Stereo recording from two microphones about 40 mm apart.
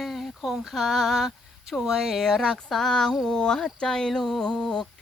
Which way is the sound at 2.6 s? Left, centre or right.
Centre.